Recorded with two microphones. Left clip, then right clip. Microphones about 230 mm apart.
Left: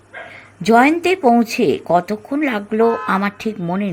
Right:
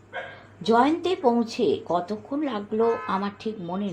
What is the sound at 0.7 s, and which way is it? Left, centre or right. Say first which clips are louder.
A woman's voice: left 8 dB; left.